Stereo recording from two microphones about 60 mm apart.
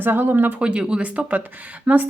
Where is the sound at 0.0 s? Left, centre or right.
Right.